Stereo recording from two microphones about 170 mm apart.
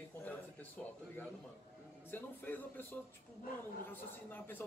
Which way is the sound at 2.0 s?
10° left (ahead or behind).